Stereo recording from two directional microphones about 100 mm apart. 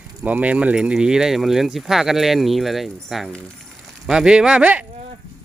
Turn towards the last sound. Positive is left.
turn(degrees=-15)  # may be behind; listen again after turning